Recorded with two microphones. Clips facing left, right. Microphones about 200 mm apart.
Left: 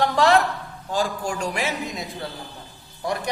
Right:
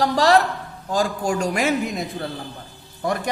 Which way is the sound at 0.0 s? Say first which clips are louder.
Right 1 dB; 35° right (ahead or behind).